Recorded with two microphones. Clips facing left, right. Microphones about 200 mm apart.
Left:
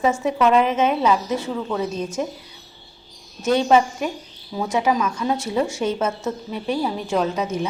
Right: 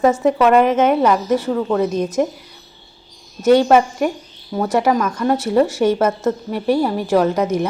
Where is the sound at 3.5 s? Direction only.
60° right (ahead or behind).